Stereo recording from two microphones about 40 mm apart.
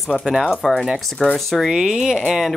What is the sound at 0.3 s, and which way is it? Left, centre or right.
Speech, centre.